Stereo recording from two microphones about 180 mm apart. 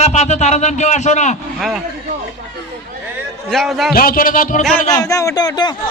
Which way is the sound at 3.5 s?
Centre (ahead or behind).